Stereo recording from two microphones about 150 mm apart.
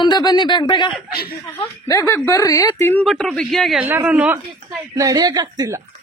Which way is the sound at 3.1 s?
Centre (ahead or behind).